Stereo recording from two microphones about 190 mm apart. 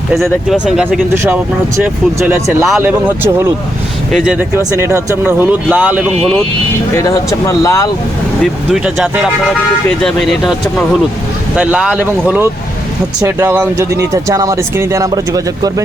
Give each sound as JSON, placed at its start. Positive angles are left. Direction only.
{"t": 0.1, "sound": "speech", "side_deg": -5}
{"t": 4.5, "sound": "speech", "side_deg": -15}
{"t": 6.9, "sound": "speech", "side_deg": 20}
{"t": 10.0, "sound": "speech", "side_deg": 5}